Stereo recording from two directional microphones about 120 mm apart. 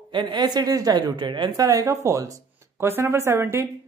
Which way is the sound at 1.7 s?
30° right (ahead or behind).